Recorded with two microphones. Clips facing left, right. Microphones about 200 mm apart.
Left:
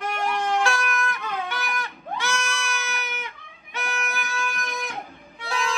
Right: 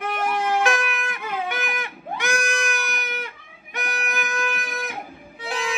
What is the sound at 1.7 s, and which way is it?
Goat, 15° right (ahead or behind).